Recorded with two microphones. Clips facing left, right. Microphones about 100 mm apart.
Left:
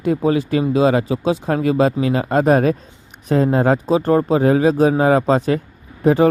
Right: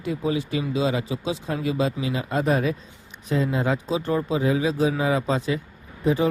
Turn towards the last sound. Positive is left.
turn(degrees=60)  # may be behind; listen again after turning